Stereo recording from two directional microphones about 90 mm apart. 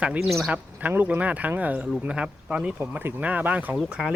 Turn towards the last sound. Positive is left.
turn(degrees=-10)  # may be behind; listen again after turning